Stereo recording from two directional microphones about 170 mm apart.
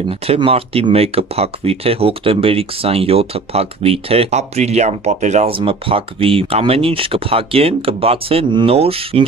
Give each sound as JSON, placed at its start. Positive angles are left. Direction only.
{"t": 0.1, "sound": "speech", "side_deg": -35}